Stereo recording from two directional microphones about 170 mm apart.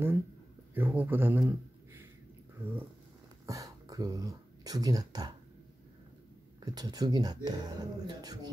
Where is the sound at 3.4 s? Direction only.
20° right (ahead or behind).